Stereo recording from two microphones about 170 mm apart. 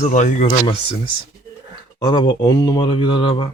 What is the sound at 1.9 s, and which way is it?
Speech, 25° left (ahead or behind).